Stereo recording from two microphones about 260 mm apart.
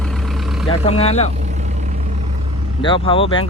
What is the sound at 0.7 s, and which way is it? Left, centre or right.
Speech, left.